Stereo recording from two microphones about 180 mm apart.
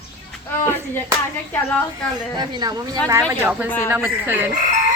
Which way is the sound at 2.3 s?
25° right (ahead or behind).